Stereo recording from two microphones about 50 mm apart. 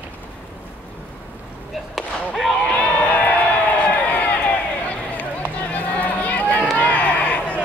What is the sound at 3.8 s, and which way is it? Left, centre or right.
Run, left.